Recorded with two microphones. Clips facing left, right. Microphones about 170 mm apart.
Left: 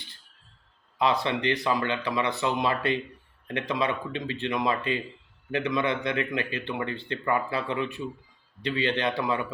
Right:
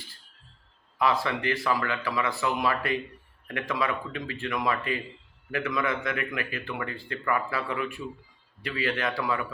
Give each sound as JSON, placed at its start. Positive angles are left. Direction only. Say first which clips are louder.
{"t": 1.2, "sound": "speech", "louder": "left 2 dB", "side_deg": 20}